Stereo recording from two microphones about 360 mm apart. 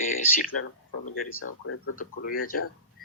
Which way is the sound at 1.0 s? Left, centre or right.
Left.